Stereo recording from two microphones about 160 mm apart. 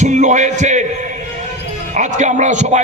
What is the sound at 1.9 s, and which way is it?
Speech, 50° right (ahead or behind).